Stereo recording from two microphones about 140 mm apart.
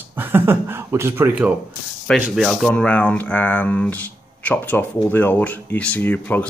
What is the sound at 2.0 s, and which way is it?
Speech, centre (ahead or behind).